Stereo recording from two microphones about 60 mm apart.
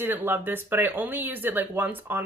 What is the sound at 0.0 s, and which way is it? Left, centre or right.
Speech, right.